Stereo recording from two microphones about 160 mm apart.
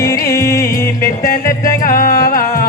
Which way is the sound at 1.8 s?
55° left (ahead or behind).